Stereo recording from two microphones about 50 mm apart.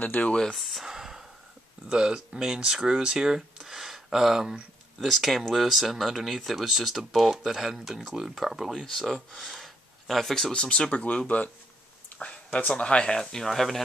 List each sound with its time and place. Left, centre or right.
0.0 s speech: left
0.3 s speech: centre
0.6 s speech: centre
0.8 s a sound: centre
1.9 s speech: centre
10.5 s speech: centre
12.1 s a sound: left
12.5 s speech: left; by 13.8 s centre